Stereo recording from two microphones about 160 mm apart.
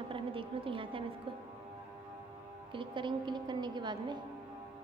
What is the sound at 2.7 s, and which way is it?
A woman's voice, 30° right (ahead or behind).